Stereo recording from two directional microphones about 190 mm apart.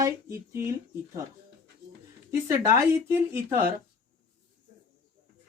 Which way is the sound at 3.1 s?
10° right (ahead or behind).